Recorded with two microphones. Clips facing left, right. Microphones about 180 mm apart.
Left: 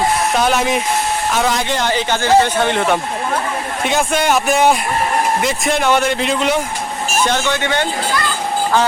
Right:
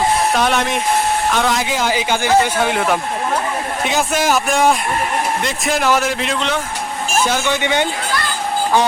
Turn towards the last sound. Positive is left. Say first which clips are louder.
# even
turn(degrees=-15)  # may be behind; listen again after turning